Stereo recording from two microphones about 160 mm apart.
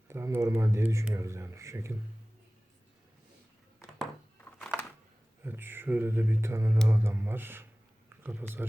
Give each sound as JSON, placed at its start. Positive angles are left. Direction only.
{"t": 0.1, "sound": "speech", "side_deg": -15}
{"t": 5.5, "sound": "speech", "side_deg": -15}